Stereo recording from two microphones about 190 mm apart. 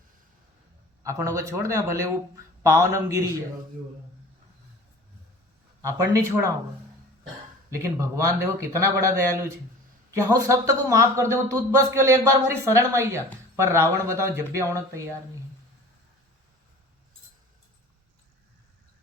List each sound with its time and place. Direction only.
1.0 s speech: 15° right (ahead or behind)
5.8 s speech: 15° right (ahead or behind)
7.7 s speech: 15° right (ahead or behind)